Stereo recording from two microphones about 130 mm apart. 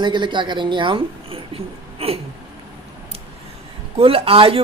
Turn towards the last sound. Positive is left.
turn(degrees=-45)  # may be behind; listen again after turning